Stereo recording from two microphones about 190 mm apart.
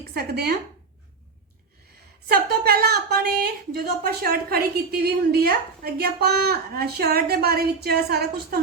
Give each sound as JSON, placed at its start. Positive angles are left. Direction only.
{"t": 0.1, "sound": "a woman's voice", "side_deg": -55}
{"t": 2.3, "sound": "a woman's voice", "side_deg": -55}